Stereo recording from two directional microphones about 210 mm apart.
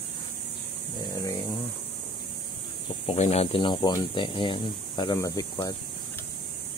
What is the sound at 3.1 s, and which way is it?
Speech, 30° left (ahead or behind).